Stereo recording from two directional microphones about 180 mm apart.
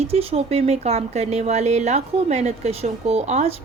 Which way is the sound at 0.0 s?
35° right (ahead or behind).